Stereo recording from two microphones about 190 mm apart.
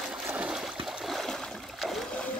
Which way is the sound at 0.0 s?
Centre (ahead or behind).